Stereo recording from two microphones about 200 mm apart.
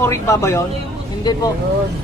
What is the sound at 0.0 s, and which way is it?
Speech, 15° left (ahead or behind).